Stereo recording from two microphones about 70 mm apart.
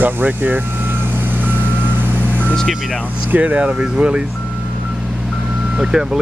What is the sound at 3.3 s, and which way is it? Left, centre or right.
Speech, right.